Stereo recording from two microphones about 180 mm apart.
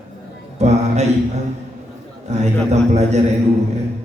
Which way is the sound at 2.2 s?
40° right (ahead or behind).